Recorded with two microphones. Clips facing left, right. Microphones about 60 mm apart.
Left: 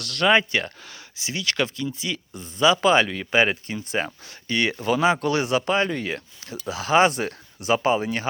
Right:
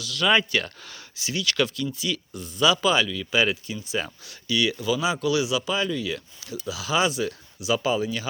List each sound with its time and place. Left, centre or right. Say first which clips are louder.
0.0 s speech: left 3 dB; left
0.3 s speech: left 2 dB; left